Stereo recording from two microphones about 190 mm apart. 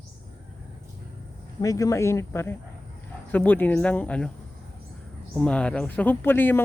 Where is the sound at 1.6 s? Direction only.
15° left (ahead or behind).